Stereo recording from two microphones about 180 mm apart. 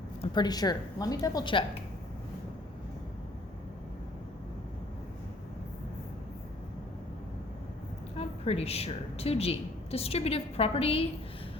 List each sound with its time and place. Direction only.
0.2 s a woman's voice: 25° left (ahead or behind)
8.1 s a woman's voice: 35° left (ahead or behind)